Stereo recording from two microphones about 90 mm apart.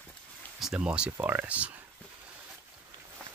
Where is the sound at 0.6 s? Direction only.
5° right (ahead or behind).